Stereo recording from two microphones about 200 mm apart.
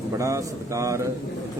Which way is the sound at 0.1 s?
15° right (ahead or behind).